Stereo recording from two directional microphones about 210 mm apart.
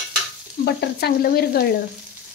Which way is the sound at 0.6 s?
50° left (ahead or behind).